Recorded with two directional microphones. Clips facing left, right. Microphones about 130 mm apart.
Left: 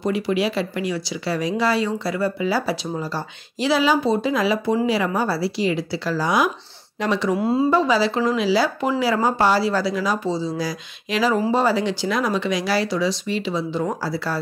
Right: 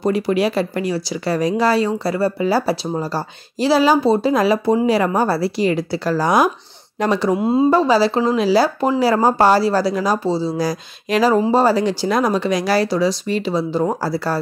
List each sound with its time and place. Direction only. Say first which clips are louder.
0.0 s a woman's voice: right 4 dB; 45° right (ahead or behind)
7.3 s a woman's voice: right 3 dB; 20° right (ahead or behind)
7.7 s speech: right 4 dB; 40° right (ahead or behind)